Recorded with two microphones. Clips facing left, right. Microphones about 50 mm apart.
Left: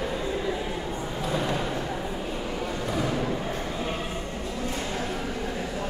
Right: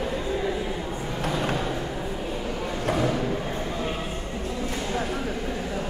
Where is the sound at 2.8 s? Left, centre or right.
Right.